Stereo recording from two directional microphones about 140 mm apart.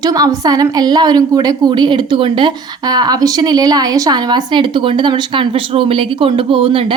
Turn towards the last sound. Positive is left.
turn(degrees=-40)  # may be behind; listen again after turning